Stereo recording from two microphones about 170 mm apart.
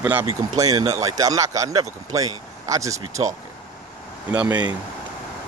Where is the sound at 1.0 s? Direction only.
20° right (ahead or behind).